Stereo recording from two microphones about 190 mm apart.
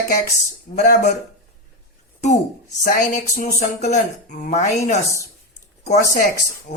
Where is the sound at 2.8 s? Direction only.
40° left (ahead or behind).